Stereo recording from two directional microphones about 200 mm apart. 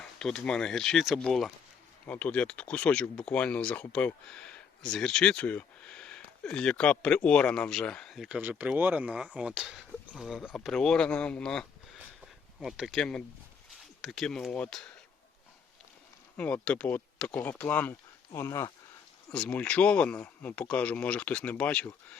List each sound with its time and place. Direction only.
0.2 s speech: 5° left (ahead or behind)
16.4 s speech: 5° left (ahead or behind)